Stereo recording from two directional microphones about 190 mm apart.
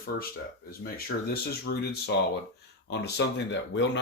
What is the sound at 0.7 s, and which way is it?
Speech, 50° left (ahead or behind).